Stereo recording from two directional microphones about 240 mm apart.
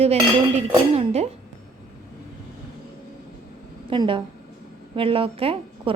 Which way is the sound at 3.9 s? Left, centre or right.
Right.